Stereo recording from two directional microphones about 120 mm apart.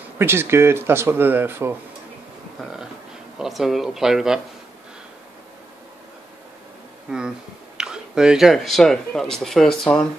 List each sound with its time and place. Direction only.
0.2 s speech: 20° right (ahead or behind)
3.3 s speech: 5° right (ahead or behind)
7.1 s speech: 5° right (ahead or behind)